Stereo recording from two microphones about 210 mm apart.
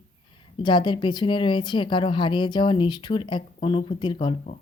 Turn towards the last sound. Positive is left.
turn(degrees=25)  # may be behind; listen again after turning